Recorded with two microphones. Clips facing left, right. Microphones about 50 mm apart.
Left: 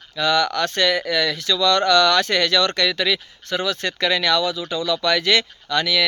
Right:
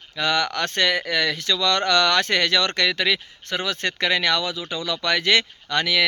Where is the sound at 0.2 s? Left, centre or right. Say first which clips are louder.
Left 3 dB; right.